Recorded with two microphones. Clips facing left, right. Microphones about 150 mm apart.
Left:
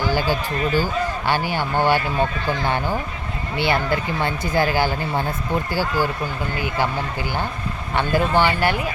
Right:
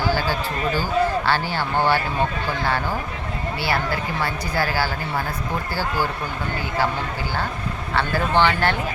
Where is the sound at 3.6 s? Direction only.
20° left (ahead or behind).